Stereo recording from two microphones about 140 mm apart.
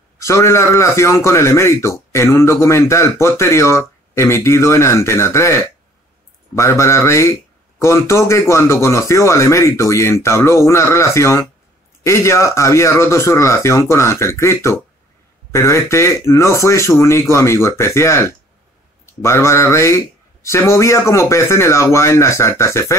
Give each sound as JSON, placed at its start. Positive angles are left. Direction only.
{"t": 0.2, "sound": "a man's voice", "side_deg": 20}